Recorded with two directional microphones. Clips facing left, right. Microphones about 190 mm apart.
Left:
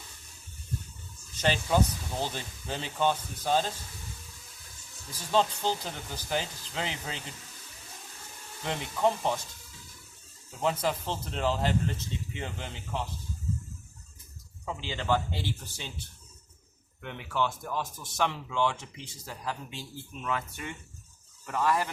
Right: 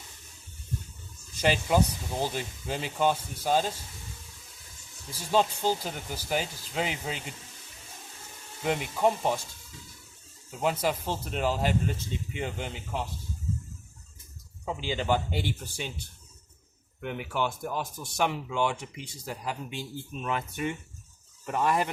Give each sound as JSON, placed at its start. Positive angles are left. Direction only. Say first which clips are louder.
{"t": 1.4, "sound": "speech", "louder": "right 2 dB", "side_deg": -10}
{"t": 5.1, "sound": "speech", "louder": "right 1 dB", "side_deg": -10}
{"t": 8.6, "sound": "speech", "louder": "right 2 dB", "side_deg": -10}
{"t": 10.6, "sound": "speech", "louder": "right 1 dB", "side_deg": -10}
{"t": 14.6, "sound": "speech", "louder": "right 4 dB", "side_deg": -15}
{"t": 17.0, "sound": "speech", "louder": "right 1 dB", "side_deg": -15}